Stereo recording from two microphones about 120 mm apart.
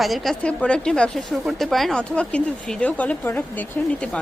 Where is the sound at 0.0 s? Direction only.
Centre (ahead or behind).